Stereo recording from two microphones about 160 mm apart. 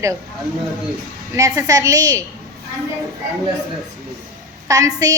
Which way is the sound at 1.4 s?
20° right (ahead or behind).